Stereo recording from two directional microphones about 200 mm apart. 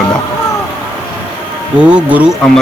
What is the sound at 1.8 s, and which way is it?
Speech, 5° right (ahead or behind).